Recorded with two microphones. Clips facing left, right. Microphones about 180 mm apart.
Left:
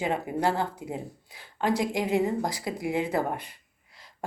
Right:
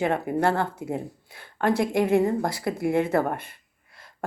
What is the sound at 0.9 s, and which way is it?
Speech, 55° right (ahead or behind).